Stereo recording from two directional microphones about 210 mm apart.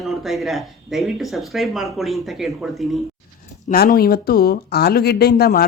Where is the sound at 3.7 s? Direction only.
45° left (ahead or behind).